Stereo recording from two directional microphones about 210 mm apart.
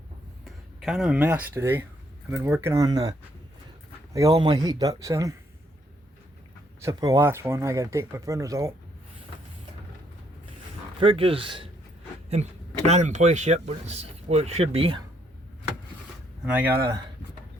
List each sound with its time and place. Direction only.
0.4 s speech: centre (ahead or behind)
6.8 s speech: 15° right (ahead or behind)
11.0 s speech: 25° right (ahead or behind)
12.9 s speech: 35° right (ahead or behind)
16.4 s speech: 5° right (ahead or behind)